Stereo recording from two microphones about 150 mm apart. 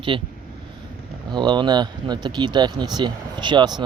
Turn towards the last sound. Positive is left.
turn(degrees=-30)  # may be behind; listen again after turning